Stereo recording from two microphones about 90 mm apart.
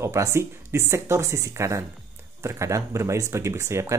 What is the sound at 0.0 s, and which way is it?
Speech, 30° right (ahead or behind).